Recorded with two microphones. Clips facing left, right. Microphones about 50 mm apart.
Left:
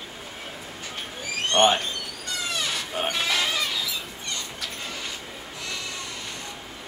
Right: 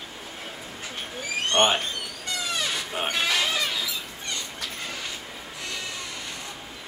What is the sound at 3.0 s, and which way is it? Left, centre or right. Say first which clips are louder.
Speech: left 2 dB; centre.